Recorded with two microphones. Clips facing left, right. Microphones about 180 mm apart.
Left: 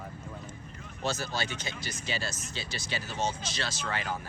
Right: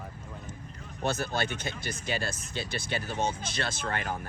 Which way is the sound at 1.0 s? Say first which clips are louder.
Right 3 dB; 55° right (ahead or behind).